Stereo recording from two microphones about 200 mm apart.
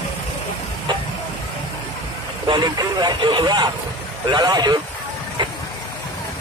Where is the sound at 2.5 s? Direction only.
20° right (ahead or behind).